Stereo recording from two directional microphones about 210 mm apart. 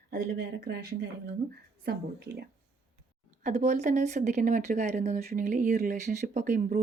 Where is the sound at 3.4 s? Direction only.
35° right (ahead or behind).